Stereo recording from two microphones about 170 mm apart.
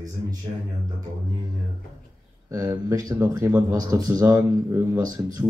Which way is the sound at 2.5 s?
20° right (ahead or behind).